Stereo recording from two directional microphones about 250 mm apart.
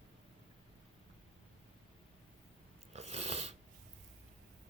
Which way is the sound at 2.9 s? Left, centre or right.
Right.